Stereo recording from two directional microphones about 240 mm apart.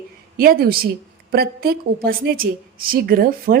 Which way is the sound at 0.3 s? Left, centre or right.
Right.